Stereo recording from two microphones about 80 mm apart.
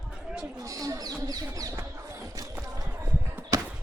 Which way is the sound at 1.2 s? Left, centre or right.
Right.